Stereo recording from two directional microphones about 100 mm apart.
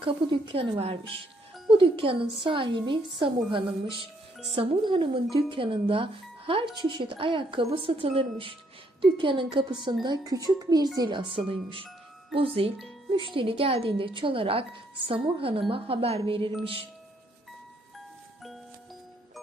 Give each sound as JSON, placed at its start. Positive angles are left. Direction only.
{"t": 0.0, "sound": "speech", "side_deg": -60}
{"t": 1.8, "sound": "speech", "side_deg": -60}
{"t": 4.5, "sound": "speech", "side_deg": -70}
{"t": 11.3, "sound": "speech", "side_deg": -60}